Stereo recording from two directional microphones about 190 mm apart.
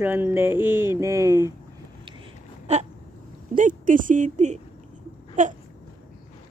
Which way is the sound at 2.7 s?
35° right (ahead or behind).